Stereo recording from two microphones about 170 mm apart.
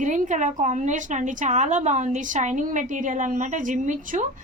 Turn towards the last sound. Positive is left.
turn(degrees=-50)  # may be behind; listen again after turning